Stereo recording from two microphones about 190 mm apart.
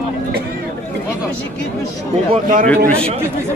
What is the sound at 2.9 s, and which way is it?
Speech, 30° right (ahead or behind).